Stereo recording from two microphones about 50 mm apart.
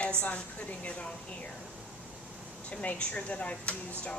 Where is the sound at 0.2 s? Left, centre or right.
Left.